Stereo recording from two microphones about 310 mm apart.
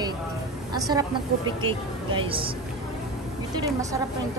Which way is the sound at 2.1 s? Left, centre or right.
Centre.